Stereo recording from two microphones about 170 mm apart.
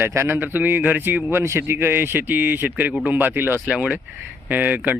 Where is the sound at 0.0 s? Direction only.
15° right (ahead or behind).